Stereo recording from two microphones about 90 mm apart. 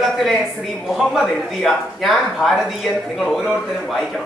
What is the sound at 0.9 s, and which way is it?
A man's voice, centre (ahead or behind).